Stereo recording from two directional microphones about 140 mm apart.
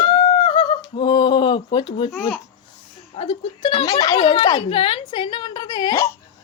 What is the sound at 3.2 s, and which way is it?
A woman's voice, 40° left (ahead or behind).